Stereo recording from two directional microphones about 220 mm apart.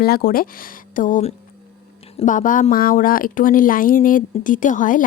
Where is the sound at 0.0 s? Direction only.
45° left (ahead or behind).